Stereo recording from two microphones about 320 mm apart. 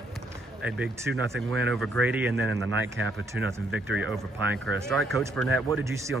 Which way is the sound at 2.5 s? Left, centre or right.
Right.